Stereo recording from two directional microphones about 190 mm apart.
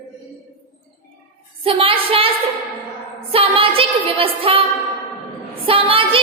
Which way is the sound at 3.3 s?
30° right (ahead or behind).